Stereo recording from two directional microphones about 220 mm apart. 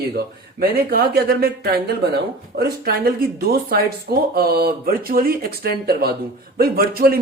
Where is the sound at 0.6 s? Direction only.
45° right (ahead or behind).